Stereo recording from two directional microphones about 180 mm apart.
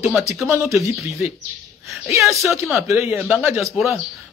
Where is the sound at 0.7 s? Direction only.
Centre (ahead or behind).